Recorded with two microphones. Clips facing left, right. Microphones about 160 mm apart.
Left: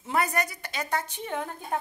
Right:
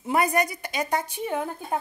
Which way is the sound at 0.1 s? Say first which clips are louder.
Right 4 dB; 15° right (ahead or behind).